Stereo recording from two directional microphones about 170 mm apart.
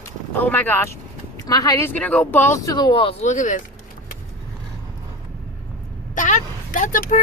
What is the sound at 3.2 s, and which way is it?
Speech, 45° left (ahead or behind).